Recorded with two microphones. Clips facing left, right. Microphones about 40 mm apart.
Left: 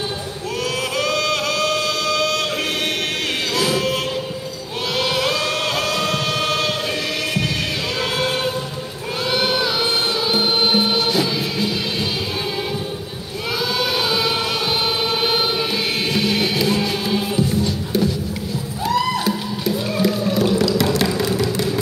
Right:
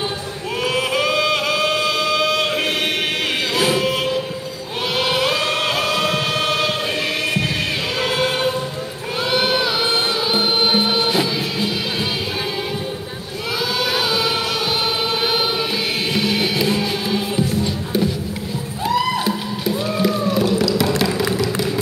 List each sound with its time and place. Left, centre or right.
0.7 s music: centre
4.9 s singing: centre
8.0 s choir: centre
9.2 s a sound: centre
9.8 s music: centre
10.2 s music: centre
11.1 s music: centre
13.6 s chant: centre
16.1 s music: centre
18.9 s music: centre